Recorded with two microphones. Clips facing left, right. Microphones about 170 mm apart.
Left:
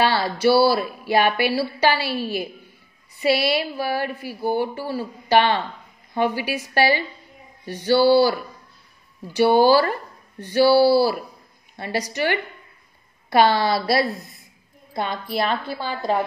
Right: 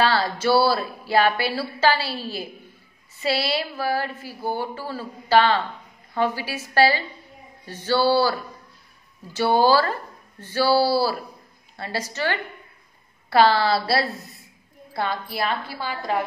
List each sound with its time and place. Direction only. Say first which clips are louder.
0.0 s a woman's voice: left 2 dB; 10° left (ahead or behind)